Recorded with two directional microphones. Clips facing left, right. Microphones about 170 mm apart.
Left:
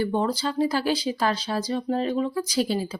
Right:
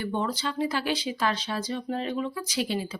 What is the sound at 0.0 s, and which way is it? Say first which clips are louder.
Speech: left 5 dB; 35° left (ahead or behind).